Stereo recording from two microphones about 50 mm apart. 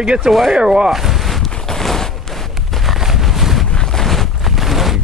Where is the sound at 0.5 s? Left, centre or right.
Centre.